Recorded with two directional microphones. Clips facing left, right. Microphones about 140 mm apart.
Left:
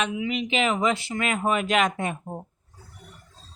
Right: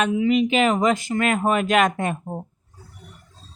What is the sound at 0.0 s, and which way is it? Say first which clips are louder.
Speech: right 8 dB; 40° right (ahead or behind).